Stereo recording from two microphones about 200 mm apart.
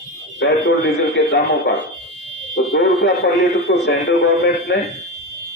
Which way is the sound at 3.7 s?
50° left (ahead or behind).